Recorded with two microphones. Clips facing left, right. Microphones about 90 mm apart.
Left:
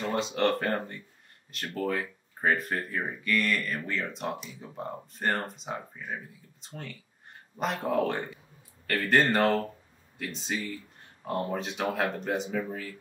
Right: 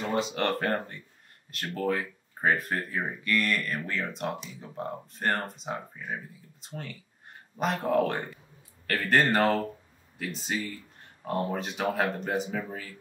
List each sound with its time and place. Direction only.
0.0 s speech: centre (ahead or behind)